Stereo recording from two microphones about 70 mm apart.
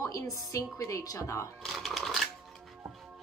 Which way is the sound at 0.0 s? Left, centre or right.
Left.